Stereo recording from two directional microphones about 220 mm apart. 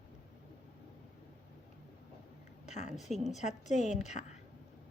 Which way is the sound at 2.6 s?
30° left (ahead or behind).